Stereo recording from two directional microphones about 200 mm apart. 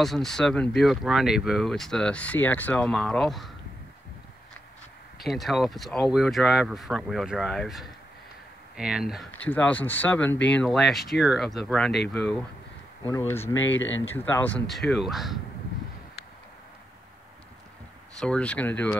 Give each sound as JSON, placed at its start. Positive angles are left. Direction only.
{"t": 0.0, "sound": "speech", "side_deg": 0}
{"t": 5.2, "sound": "speech", "side_deg": 0}
{"t": 13.6, "sound": "speech", "side_deg": 70}
{"t": 14.0, "sound": "speech", "side_deg": 10}
{"t": 18.2, "sound": "speech", "side_deg": 5}